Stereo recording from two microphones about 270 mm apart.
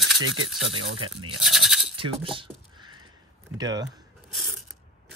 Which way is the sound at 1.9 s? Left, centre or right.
Centre.